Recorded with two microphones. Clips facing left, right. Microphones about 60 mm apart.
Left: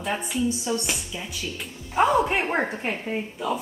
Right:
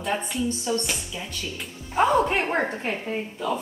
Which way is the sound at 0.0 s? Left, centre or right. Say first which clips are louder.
Left 1 dB; centre.